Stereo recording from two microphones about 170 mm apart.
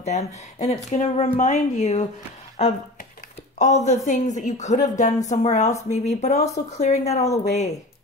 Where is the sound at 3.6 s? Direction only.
45° left (ahead or behind).